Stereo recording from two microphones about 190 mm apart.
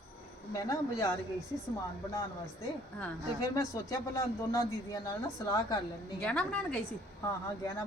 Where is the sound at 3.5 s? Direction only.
15° left (ahead or behind).